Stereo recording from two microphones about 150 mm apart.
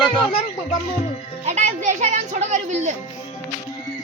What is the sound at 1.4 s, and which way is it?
Speech, 50° right (ahead or behind).